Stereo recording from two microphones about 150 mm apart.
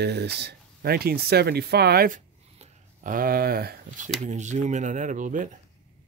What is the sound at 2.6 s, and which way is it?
Speech, 60° right (ahead or behind).